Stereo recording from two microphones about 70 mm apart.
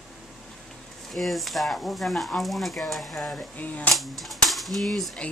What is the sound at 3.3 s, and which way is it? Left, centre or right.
Speech, centre.